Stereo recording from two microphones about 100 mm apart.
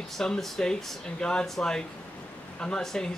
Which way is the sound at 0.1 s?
5° left (ahead or behind).